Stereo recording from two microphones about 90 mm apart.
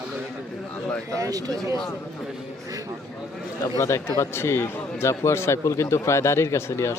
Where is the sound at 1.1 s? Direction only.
40° right (ahead or behind).